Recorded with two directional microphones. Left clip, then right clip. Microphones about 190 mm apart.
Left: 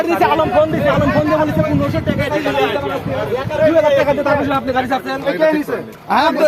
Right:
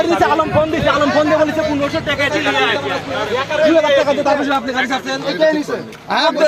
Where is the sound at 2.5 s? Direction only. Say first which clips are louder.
Even; 25° right (ahead or behind).